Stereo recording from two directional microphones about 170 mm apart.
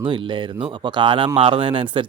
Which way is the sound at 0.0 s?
30° right (ahead or behind).